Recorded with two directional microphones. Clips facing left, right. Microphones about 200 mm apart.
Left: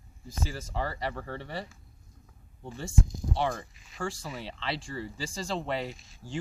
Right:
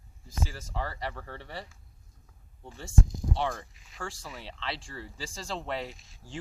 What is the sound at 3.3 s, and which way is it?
Speech, 5° left (ahead or behind).